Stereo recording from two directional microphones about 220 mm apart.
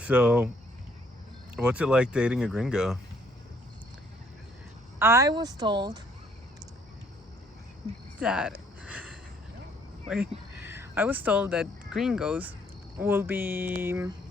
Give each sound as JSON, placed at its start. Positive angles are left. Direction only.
{"t": 0.0, "sound": "speech", "side_deg": -5}
{"t": 1.5, "sound": "speech", "side_deg": -5}
{"t": 4.9, "sound": "speech", "side_deg": -10}
{"t": 8.2, "sound": "a sound", "side_deg": -5}
{"t": 10.1, "sound": "speech", "side_deg": -5}